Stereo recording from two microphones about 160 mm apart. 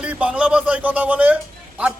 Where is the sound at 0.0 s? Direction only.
5° right (ahead or behind).